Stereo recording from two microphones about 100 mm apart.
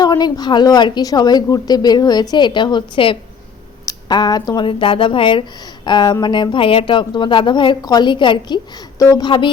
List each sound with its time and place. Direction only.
0.0 s speech: 40° left (ahead or behind)
3.8 s speech: 45° left (ahead or behind)
9.2 s speech: 50° left (ahead or behind)